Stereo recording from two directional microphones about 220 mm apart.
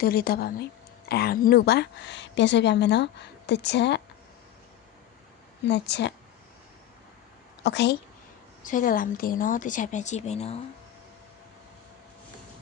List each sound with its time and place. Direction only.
0.0 s speech: 45° left (ahead or behind)
5.6 s speech: 50° left (ahead or behind)
7.6 s speech: 50° left (ahead or behind)
8.6 s speech: 35° left (ahead or behind)